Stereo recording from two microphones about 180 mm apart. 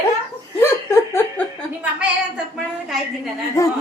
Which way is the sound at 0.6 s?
15° left (ahead or behind).